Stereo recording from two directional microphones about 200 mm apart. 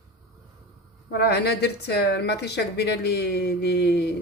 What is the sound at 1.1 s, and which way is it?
Speech, 55° left (ahead or behind).